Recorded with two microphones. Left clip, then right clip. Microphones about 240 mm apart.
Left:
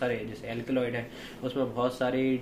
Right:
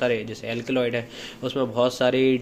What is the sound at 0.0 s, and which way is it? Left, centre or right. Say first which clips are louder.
Speech: right 7 dB; right.